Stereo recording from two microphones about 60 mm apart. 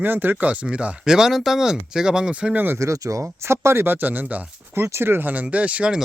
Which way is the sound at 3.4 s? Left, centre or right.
Right.